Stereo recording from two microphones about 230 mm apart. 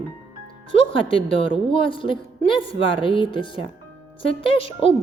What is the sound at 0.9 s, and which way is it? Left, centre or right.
A woman's voice, left.